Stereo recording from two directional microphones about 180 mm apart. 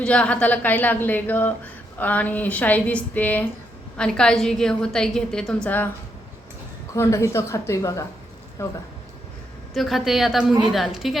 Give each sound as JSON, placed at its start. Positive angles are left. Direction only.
{"t": 0.0, "sound": "a woman's voice", "side_deg": 5}
{"t": 6.9, "sound": "a woman's voice", "side_deg": 15}
{"t": 9.7, "sound": "a woman's voice", "side_deg": 0}